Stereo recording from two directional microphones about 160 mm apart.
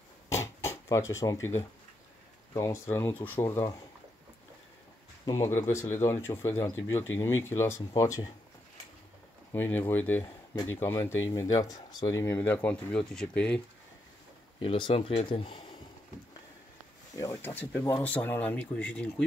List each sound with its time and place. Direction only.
0.3 s a sound: 15° left (ahead or behind)
2.5 s speech: 20° left (ahead or behind)
5.2 s speech: 20° left (ahead or behind)
9.5 s speech: 10° left (ahead or behind)
14.6 s speech: 30° left (ahead or behind)
17.1 s speech: 20° left (ahead or behind)